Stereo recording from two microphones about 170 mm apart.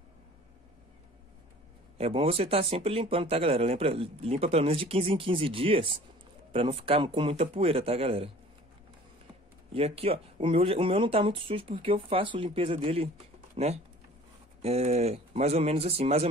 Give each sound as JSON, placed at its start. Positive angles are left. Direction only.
{"t": 2.0, "sound": "speech", "side_deg": -35}
{"t": 9.8, "sound": "speech", "side_deg": -35}
{"t": 14.6, "sound": "speech", "side_deg": -40}